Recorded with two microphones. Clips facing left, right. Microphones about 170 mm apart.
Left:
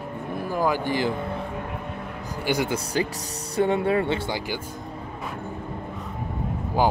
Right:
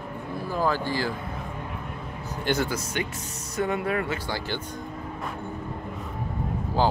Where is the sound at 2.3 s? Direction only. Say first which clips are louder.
Left 1 dB; 10° left (ahead or behind).